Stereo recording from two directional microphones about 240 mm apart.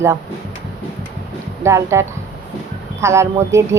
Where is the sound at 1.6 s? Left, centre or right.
Centre.